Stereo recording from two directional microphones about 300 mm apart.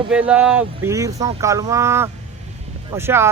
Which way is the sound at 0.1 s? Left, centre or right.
Centre.